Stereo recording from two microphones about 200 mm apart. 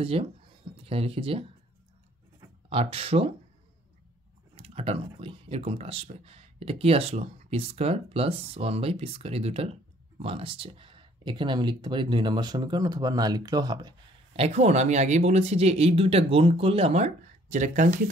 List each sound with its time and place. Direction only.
0.0 s speech: 30° right (ahead or behind)
2.7 s speech: 30° right (ahead or behind)
4.6 s speech: 30° right (ahead or behind)